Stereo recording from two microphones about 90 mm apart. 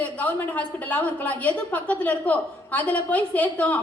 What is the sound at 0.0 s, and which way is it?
A woman's voice, 15° left (ahead or behind).